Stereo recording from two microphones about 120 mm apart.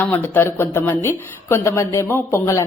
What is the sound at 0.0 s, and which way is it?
Speech, 15° left (ahead or behind).